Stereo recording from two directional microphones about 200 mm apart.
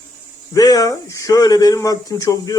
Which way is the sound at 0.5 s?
20° left (ahead or behind).